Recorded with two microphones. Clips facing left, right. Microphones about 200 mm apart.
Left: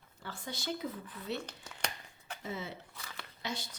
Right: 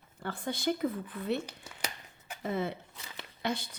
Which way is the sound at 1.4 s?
10° right (ahead or behind).